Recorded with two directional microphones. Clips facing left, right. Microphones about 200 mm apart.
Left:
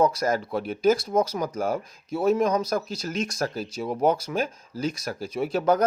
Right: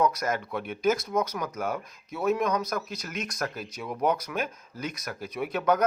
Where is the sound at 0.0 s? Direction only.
30° left (ahead or behind).